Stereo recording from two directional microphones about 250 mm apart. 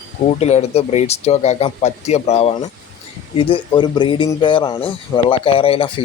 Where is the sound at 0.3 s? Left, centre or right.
Left.